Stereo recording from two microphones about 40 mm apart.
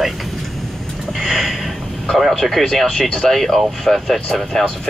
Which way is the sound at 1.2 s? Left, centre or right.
Centre.